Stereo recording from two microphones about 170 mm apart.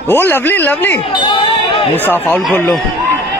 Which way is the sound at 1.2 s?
25° left (ahead or behind).